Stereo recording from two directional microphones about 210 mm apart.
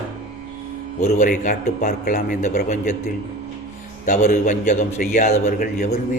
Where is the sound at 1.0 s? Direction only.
35° left (ahead or behind).